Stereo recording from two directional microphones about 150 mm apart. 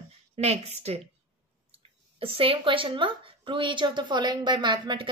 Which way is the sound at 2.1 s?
35° right (ahead or behind).